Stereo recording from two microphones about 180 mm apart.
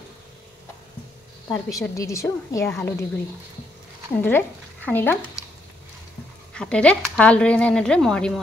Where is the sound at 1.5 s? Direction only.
20° left (ahead or behind).